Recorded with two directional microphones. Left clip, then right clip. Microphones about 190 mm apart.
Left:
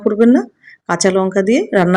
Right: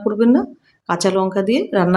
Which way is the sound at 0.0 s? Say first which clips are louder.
Left 4 dB; 15° left (ahead or behind).